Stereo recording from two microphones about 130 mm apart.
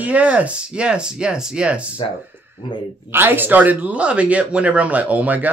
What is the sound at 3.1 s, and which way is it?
Speech, 15° right (ahead or behind).